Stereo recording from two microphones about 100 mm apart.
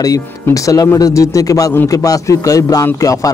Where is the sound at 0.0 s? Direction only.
35° left (ahead or behind).